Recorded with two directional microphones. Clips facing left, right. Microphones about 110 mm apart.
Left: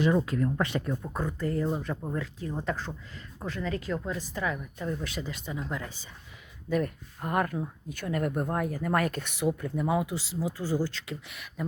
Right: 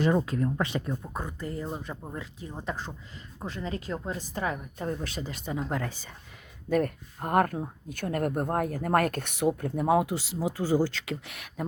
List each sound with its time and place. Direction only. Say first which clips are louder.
0.3 s speech: even; 25° right (ahead or behind); by 11.6 s 60° right (ahead or behind)